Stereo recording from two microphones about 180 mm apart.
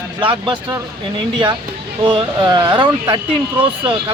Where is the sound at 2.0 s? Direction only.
30° right (ahead or behind).